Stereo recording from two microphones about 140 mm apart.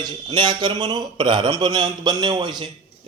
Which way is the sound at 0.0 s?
30° right (ahead or behind).